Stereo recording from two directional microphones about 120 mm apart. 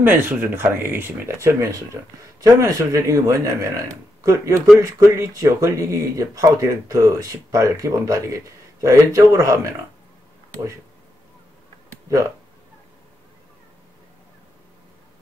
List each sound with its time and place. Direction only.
0.0 s speech: 20° right (ahead or behind)